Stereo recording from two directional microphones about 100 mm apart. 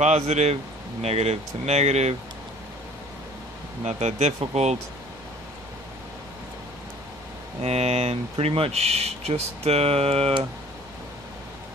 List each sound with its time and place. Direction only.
0.1 s speech: 90° right
4.2 s speech: 90° right
7.6 s speech: 90° right